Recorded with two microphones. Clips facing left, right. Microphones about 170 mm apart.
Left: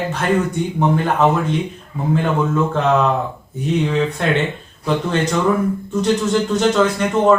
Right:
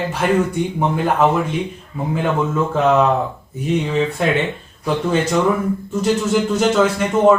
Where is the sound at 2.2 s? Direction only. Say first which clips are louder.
Even; 5° right (ahead or behind).